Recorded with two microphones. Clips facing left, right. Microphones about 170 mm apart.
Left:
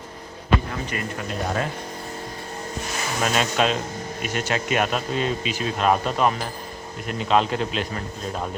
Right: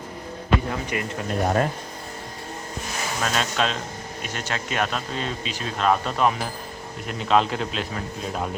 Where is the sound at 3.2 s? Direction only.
15° left (ahead or behind).